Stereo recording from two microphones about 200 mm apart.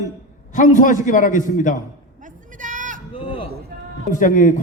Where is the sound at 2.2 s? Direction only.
40° right (ahead or behind).